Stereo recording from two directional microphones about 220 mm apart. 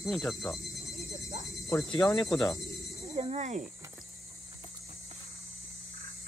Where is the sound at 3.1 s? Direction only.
25° right (ahead or behind).